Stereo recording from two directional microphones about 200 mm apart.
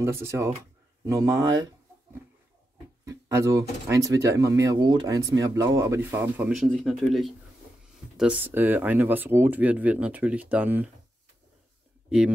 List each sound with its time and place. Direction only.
0.0 s speech: 15° right (ahead or behind)
3.1 s speech: 15° right (ahead or behind)